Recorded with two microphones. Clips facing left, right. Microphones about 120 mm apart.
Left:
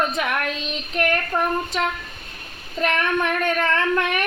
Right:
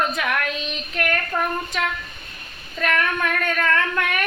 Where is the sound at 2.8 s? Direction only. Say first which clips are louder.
Left 1 dB; 25° left (ahead or behind).